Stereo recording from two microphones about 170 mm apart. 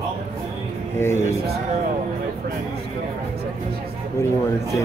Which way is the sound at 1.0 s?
15° left (ahead or behind).